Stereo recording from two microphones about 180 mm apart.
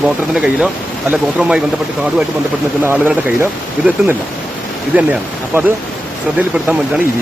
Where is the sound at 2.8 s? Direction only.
10° right (ahead or behind).